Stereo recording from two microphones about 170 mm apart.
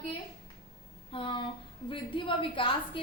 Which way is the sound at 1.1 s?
30° left (ahead or behind).